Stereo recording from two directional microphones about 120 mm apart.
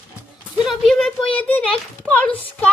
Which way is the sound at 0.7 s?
Centre (ahead or behind).